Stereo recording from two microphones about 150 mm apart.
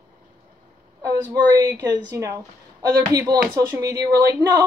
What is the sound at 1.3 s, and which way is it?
Speech, 25° right (ahead or behind).